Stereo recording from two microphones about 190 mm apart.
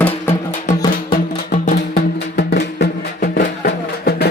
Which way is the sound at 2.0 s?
60° left (ahead or behind).